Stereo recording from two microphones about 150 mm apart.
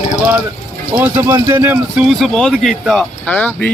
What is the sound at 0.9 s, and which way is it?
A man's voice, 15° right (ahead or behind).